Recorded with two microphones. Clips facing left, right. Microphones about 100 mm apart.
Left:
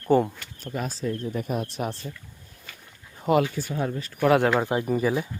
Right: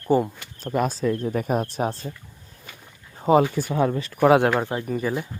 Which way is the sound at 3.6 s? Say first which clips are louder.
Right 6 dB; 90° right.